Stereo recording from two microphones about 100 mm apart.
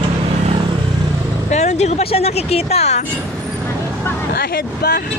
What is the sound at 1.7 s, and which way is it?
Speech, 90° left.